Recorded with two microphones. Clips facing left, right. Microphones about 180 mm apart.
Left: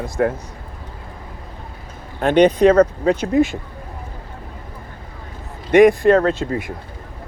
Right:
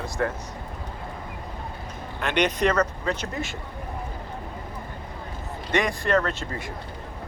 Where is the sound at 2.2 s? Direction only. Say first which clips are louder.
Left 11 dB; 50° left (ahead or behind).